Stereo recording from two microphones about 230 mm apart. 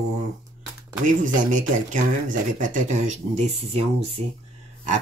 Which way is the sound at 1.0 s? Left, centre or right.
Right.